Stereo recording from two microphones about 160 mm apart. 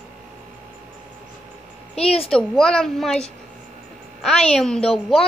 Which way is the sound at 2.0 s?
40° left (ahead or behind).